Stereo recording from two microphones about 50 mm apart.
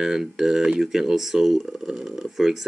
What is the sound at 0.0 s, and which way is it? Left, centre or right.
Speech, centre.